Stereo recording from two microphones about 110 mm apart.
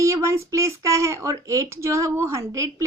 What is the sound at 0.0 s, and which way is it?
A woman's voice, 25° right (ahead or behind).